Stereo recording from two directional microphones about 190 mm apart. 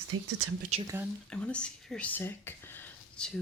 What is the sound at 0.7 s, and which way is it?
Speech, 35° right (ahead or behind).